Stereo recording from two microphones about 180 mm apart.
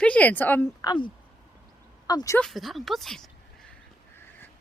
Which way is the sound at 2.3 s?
Centre (ahead or behind).